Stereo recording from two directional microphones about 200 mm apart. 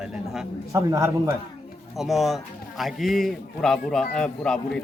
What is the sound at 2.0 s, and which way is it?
A man's voice, centre (ahead or behind).